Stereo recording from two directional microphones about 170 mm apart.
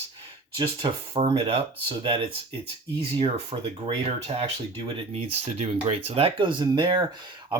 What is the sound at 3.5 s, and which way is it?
Speech, 35° right (ahead or behind).